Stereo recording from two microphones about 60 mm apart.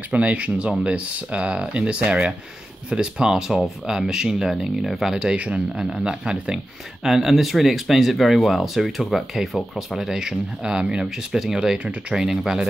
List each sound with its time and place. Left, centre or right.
0.1 s speech: right
5.4 s speech: right
11.8 s speech: right
12.2 s speech: centre